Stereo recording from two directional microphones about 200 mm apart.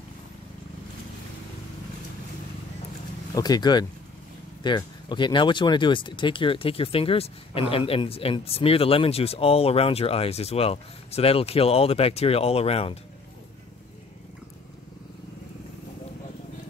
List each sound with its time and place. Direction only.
3.3 s speech: 20° left (ahead or behind)